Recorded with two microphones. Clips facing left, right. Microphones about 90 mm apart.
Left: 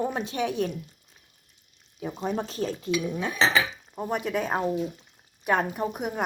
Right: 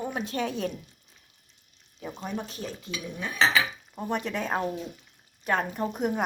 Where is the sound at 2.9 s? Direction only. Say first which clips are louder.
Left 8 dB; centre (ahead or behind).